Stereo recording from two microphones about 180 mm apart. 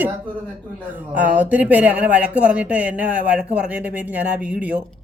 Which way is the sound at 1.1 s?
10° right (ahead or behind).